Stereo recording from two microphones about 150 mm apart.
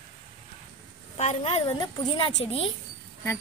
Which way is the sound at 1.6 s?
25° left (ahead or behind).